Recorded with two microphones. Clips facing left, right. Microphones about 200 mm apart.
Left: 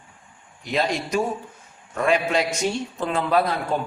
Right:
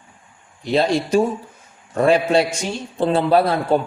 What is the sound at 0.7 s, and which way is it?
A man's voice, 30° right (ahead or behind).